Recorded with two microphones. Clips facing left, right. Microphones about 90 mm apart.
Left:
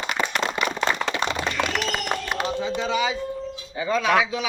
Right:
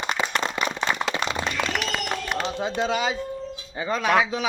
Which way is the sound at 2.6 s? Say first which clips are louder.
Right 2 dB; 65° right (ahead or behind).